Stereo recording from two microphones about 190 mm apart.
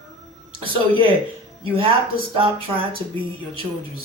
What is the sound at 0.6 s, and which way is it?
Speech, 25° right (ahead or behind).